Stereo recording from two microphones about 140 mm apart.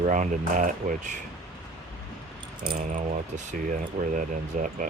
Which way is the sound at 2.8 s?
65° right (ahead or behind).